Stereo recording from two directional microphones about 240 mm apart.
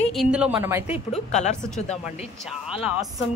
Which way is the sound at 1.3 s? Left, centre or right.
Left.